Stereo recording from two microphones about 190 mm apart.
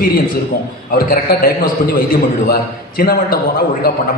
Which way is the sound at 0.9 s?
50° left (ahead or behind).